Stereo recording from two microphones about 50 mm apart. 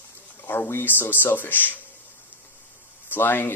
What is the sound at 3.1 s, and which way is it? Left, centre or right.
Speech, left.